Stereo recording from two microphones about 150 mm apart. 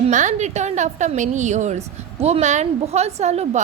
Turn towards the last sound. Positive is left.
turn(degrees=-45)  # may be behind; listen again after turning